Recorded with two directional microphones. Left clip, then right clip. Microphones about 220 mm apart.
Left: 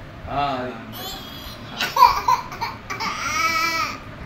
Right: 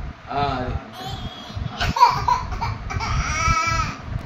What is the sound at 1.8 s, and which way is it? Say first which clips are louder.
Laughter: left 1 dB; 5° right (ahead or behind).